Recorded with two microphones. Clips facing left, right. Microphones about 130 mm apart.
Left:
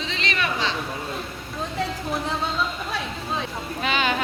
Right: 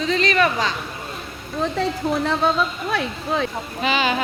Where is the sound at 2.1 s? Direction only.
65° right (ahead or behind).